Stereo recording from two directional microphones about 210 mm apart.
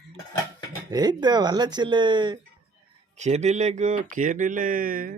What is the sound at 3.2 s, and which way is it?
Speech, 30° right (ahead or behind).